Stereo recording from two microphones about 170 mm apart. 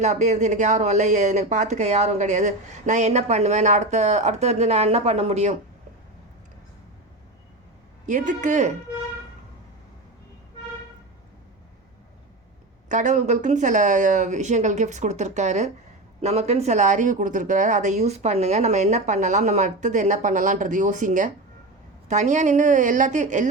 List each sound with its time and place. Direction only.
0.0 s speech: 45° right (ahead or behind)
8.0 s speech: 45° right (ahead or behind)
12.9 s speech: 45° right (ahead or behind)